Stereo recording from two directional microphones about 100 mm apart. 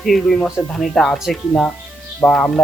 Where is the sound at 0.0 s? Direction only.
5° left (ahead or behind).